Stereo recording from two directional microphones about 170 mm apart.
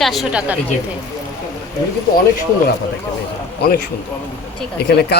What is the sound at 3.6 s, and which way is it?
Speech, 65° left (ahead or behind).